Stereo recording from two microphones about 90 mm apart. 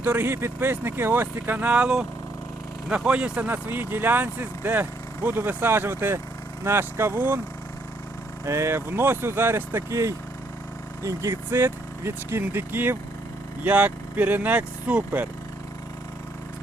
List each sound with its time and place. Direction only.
0.0 s speech: 20° right (ahead or behind)
8.4 s speech: 30° right (ahead or behind); by 15.3 s 15° right (ahead or behind)